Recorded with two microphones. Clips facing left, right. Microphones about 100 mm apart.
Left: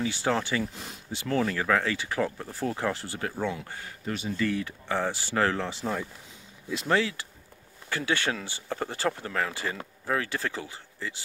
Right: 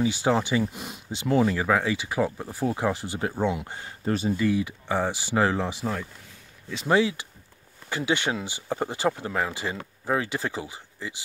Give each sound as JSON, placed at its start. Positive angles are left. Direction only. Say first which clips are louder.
{"t": 0.0, "sound": "speech", "louder": "right 4 dB", "side_deg": -15}
{"t": 6.9, "sound": "speech", "louder": "right 4 dB", "side_deg": -15}